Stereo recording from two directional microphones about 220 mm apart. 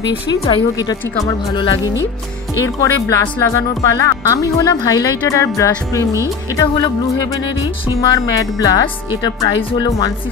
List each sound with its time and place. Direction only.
0.3 s speech: 15° left (ahead or behind)
8.5 s speech: 15° left (ahead or behind)